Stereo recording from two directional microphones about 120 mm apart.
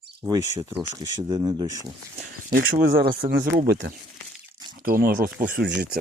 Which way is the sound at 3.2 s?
50° right (ahead or behind).